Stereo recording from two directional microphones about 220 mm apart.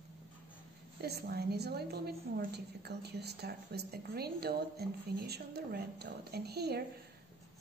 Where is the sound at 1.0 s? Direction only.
45° right (ahead or behind).